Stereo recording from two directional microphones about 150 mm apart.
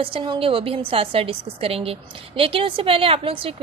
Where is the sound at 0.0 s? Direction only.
35° right (ahead or behind).